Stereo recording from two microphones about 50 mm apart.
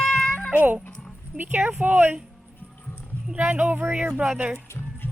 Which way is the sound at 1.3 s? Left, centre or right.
Right.